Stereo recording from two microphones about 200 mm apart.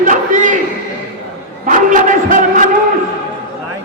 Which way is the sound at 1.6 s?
40° right (ahead or behind).